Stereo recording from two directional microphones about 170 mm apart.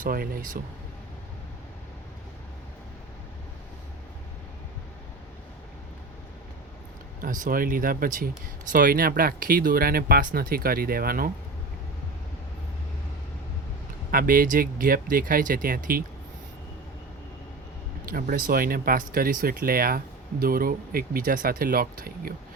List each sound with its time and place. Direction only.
0.0 s speech: 55° right (ahead or behind)
7.2 s speech: 55° right (ahead or behind)
14.1 s speech: 55° right (ahead or behind)
18.1 s speech: 55° right (ahead or behind)